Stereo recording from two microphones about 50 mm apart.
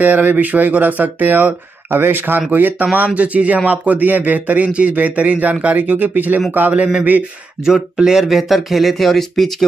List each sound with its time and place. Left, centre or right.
0.0 s speech: right
6.7 s speech: right
7.6 s speech: centre